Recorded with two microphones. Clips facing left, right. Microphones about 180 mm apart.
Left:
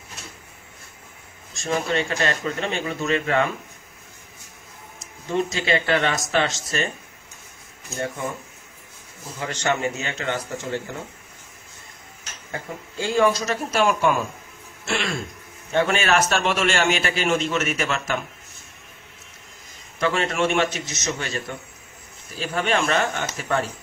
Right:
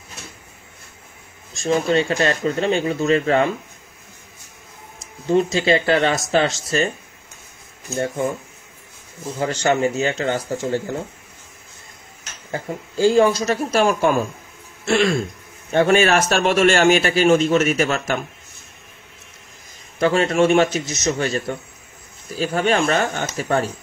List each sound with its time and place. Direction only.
1.5 s a man's voice: 30° right (ahead or behind)
5.3 s a man's voice: 35° right (ahead or behind)
9.4 s a man's voice: 30° right (ahead or behind)
12.4 s a man's voice: 35° right (ahead or behind)
20.0 s a man's voice: 35° right (ahead or behind)